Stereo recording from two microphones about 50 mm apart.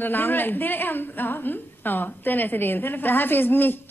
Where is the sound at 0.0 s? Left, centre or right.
Left.